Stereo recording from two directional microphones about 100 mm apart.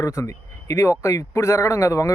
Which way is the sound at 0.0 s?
30° left (ahead or behind).